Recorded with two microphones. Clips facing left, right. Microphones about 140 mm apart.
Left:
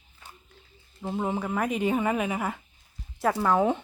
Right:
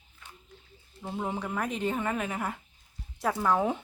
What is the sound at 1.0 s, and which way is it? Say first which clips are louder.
Speech: left 4 dB; 10° left (ahead or behind).